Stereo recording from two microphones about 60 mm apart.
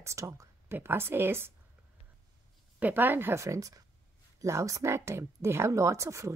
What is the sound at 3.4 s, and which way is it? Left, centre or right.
Speech, right.